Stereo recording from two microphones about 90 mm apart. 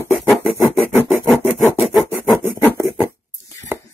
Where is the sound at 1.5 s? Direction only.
Centre (ahead or behind).